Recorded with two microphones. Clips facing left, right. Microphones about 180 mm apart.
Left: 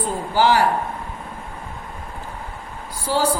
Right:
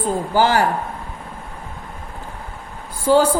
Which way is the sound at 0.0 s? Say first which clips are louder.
Right 2 dB; 45° right (ahead or behind).